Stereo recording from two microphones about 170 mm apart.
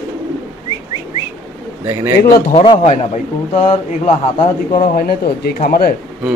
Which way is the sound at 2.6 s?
35° left (ahead or behind).